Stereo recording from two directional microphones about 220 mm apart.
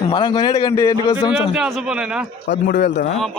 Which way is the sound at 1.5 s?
5° right (ahead or behind).